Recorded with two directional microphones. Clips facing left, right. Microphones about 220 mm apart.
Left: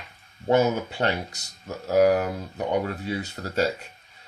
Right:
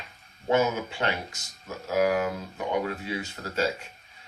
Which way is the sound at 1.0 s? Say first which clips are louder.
Left 3 dB; 35° left (ahead or behind).